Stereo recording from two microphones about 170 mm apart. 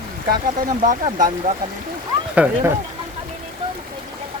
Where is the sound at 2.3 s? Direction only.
10° right (ahead or behind).